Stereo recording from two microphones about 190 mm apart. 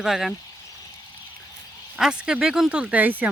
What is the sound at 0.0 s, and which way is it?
Speech, centre (ahead or behind).